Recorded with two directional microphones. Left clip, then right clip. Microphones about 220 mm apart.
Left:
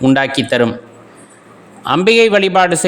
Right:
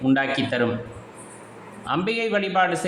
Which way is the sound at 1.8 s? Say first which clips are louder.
Left 14 dB; 50° left (ahead or behind).